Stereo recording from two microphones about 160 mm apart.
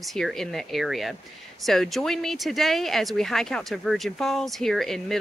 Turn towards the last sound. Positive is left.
turn(degrees=0)  # may be behind; listen again after turning